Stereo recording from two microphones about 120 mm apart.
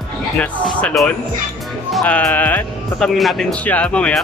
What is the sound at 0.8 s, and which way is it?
Speech, 5° left (ahead or behind).